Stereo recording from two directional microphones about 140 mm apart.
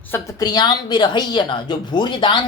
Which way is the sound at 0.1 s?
25° left (ahead or behind).